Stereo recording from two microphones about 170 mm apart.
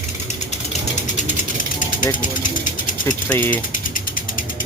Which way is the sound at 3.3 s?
10° left (ahead or behind).